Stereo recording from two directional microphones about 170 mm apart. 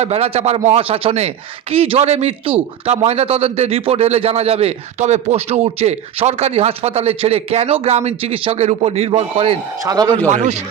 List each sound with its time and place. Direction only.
0.0 s a man's voice: 40° right (ahead or behind)
9.8 s speech: 25° right (ahead or behind)
10.2 s speech: 45° right (ahead or behind)